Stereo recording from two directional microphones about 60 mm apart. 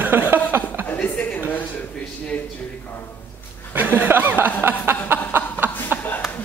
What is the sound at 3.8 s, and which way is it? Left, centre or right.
Chuckle, right.